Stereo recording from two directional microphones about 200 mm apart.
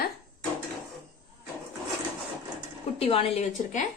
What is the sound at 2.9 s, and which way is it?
Speech, 30° left (ahead or behind).